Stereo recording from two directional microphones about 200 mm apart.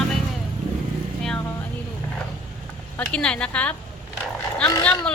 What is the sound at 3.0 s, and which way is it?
Speech, 5° left (ahead or behind).